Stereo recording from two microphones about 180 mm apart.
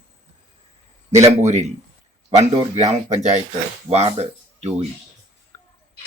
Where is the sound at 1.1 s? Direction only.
40° right (ahead or behind).